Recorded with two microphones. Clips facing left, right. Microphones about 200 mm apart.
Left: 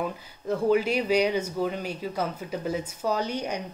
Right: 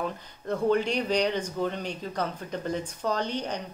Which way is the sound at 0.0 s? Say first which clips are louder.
Left 2 dB; 5° left (ahead or behind).